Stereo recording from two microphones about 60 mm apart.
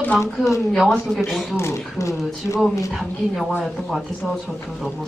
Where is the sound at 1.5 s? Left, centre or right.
Left.